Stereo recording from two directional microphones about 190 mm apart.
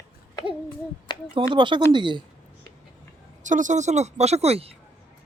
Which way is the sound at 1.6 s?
25° right (ahead or behind).